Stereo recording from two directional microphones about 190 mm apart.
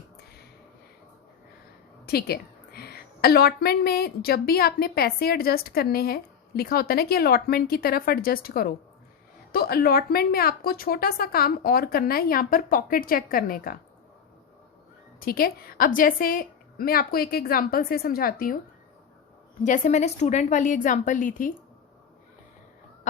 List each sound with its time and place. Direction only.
2.0 s a woman's voice: 55° left (ahead or behind)
15.2 s a woman's voice: 50° left (ahead or behind)
19.6 s a woman's voice: 40° left (ahead or behind)